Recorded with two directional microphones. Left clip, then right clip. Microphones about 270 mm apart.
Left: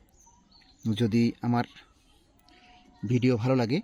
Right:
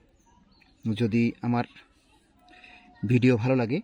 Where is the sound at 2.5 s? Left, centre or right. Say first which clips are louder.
Right 5 dB; centre.